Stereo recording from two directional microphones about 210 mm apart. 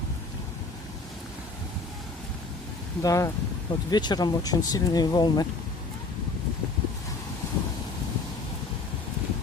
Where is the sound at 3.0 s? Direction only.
15° left (ahead or behind).